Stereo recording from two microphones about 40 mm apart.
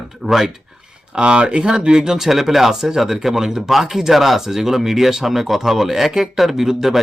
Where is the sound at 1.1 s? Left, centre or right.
Right; by 7.0 s centre.